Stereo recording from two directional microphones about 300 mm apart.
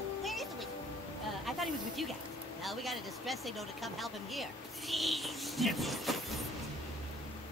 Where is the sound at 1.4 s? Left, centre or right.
Centre.